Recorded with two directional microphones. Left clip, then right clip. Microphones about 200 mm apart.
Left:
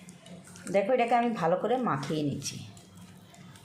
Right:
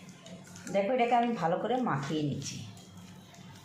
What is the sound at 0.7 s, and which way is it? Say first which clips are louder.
Speech: left 2 dB; 45° left (ahead or behind).